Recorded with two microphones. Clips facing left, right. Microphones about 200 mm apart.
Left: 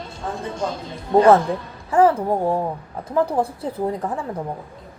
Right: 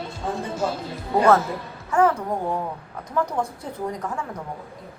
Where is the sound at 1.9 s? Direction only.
35° left (ahead or behind).